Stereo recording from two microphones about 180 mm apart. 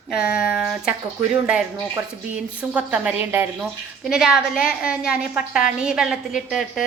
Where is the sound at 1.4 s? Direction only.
5° right (ahead or behind).